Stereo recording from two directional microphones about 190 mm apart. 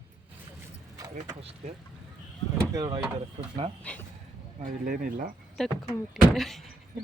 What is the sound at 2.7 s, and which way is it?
Speech, 20° right (ahead or behind).